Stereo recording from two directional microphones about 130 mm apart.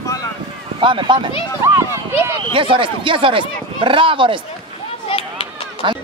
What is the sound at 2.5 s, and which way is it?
Speech, 40° right (ahead or behind).